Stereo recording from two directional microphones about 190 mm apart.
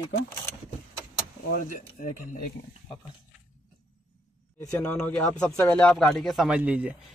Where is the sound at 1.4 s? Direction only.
50° left (ahead or behind).